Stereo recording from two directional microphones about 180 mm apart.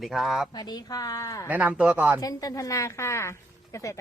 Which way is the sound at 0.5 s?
20° left (ahead or behind).